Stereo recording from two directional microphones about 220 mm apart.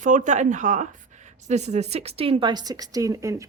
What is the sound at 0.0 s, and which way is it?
A woman's voice, 35° right (ahead or behind).